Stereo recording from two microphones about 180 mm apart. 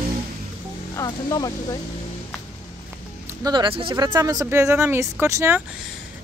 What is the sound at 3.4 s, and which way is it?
Speech, 25° right (ahead or behind).